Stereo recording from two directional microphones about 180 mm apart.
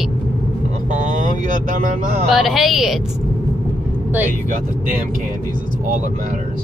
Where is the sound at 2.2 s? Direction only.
Centre (ahead or behind).